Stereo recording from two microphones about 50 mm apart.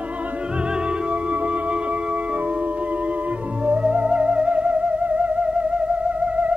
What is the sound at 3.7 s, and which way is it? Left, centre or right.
Music, right.